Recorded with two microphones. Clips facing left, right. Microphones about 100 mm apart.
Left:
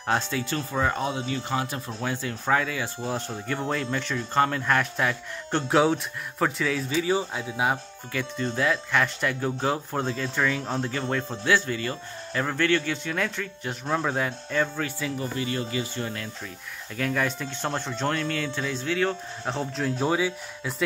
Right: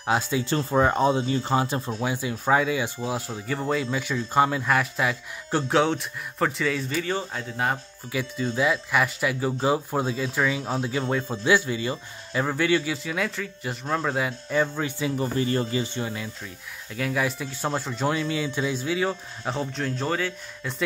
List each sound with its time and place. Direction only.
0.0 s speech: 10° right (ahead or behind)
0.4 s speech: 30° right (ahead or behind)
1.9 s speech: 10° right (ahead or behind); by 7.8 s 5° left (ahead or behind)
8.1 s speech: 10° right (ahead or behind)
14.5 s speech: 15° right (ahead or behind)
16.0 s speech: 10° right (ahead or behind); by 20.7 s 10° left (ahead or behind)